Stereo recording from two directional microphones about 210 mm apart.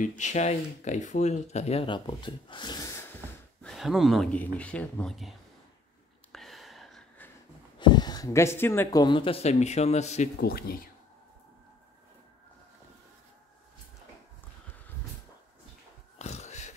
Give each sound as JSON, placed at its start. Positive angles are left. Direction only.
{"t": 0.2, "sound": "speech", "side_deg": 35}
{"t": 3.6, "sound": "speech", "side_deg": 0}
{"t": 6.3, "sound": "a sound", "side_deg": 0}
{"t": 7.8, "sound": "speech", "side_deg": 20}
{"t": 9.0, "sound": "speech", "side_deg": 25}
{"t": 10.4, "sound": "speech", "side_deg": 45}
{"t": 16.2, "sound": "a sound", "side_deg": 30}